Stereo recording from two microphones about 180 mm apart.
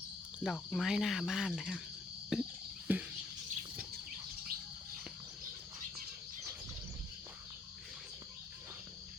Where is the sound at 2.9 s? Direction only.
10° right (ahead or behind).